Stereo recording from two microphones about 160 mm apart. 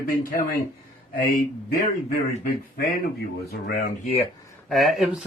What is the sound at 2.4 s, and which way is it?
Speech, 65° left (ahead or behind).